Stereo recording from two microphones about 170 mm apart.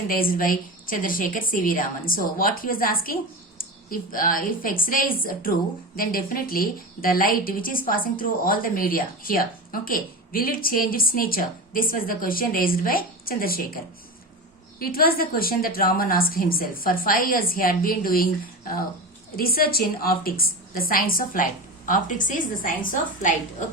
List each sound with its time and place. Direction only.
0.1 s a woman's voice: 60° left (ahead or behind)
14.8 s a woman's voice: 60° left (ahead or behind)
19.4 s a woman's voice: 60° left (ahead or behind)